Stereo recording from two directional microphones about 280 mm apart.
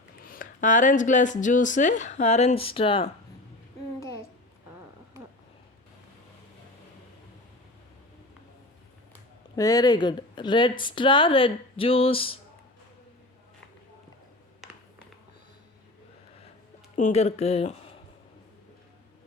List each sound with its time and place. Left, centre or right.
0.3 s speech: left
9.6 s speech: centre
16.9 s speech: left